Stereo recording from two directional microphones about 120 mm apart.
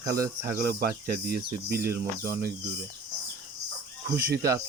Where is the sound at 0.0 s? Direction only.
25° right (ahead or behind).